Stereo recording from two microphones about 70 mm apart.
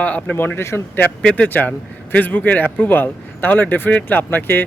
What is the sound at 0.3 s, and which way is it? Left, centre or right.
Speech, left.